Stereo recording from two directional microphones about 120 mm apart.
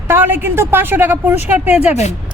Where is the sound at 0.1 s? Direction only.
15° right (ahead or behind).